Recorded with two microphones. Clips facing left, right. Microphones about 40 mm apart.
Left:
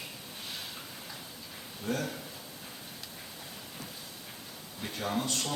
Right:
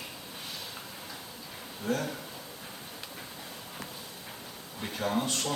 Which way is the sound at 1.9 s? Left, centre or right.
Centre.